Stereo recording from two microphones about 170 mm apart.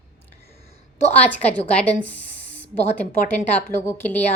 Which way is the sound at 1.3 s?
10° left (ahead or behind).